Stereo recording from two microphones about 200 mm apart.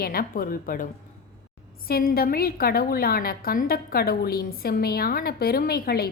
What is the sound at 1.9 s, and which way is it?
A woman's voice, 50° left (ahead or behind).